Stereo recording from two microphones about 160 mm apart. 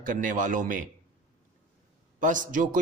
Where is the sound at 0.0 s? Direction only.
55° right (ahead or behind).